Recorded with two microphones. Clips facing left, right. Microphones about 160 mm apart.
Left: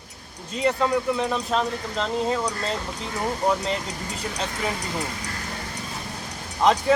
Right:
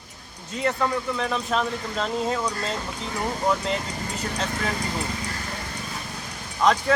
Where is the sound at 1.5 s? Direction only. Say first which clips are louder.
Left 1 dB; centre (ahead or behind).